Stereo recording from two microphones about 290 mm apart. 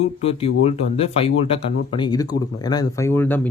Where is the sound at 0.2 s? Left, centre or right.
Centre.